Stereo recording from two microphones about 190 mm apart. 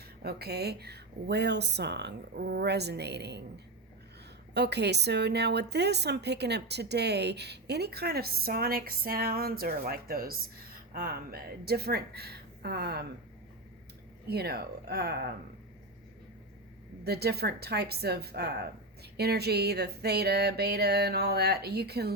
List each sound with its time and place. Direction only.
0.2 s a woman's voice: 55° right (ahead or behind)
4.5 s a woman's voice: 60° right (ahead or behind)
14.3 s a woman's voice: 55° right (ahead or behind)
17.0 s a woman's voice: 55° right (ahead or behind)